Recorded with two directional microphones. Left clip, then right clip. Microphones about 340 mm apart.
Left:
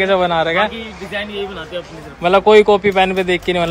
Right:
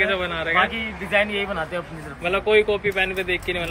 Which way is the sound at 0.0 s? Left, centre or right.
Centre.